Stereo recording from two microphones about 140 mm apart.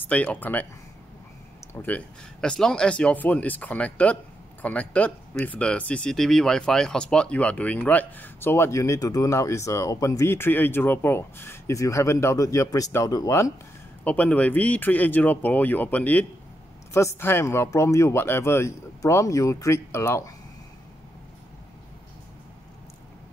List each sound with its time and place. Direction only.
0.0 s speech: 10° left (ahead or behind)
1.7 s speech: 10° left (ahead or behind)
14.0 s speech: 10° left (ahead or behind)